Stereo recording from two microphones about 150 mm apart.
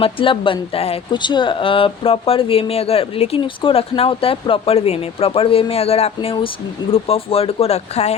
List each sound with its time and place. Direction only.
0.0 s speech: 35° left (ahead or behind)